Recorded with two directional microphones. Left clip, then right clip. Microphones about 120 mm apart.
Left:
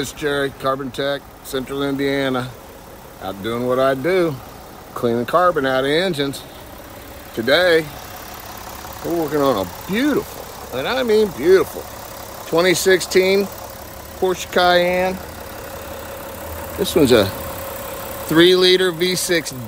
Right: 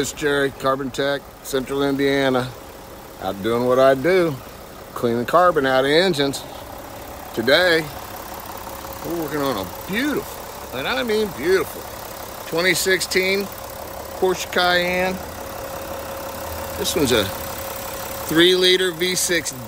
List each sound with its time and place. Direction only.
0.0 s speech: 20° right (ahead or behind)
7.3 s speech: 5° right (ahead or behind)
9.3 s speech: 5° left (ahead or behind)
12.4 s speech: 20° left (ahead or behind)
14.2 s speech: 5° right (ahead or behind)
16.8 s speech: 15° left (ahead or behind)
18.3 s speech: 25° left (ahead or behind)